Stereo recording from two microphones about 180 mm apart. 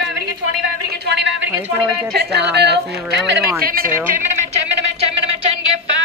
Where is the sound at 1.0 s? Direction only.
65° right (ahead or behind).